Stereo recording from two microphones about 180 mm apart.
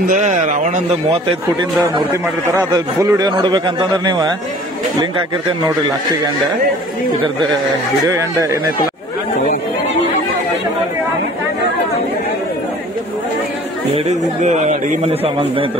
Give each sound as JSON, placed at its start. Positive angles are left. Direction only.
{"t": 0.0, "sound": "speech", "side_deg": -45}
{"t": 2.7, "sound": "a man's voice", "side_deg": -20}
{"t": 13.9, "sound": "a man's voice", "side_deg": -40}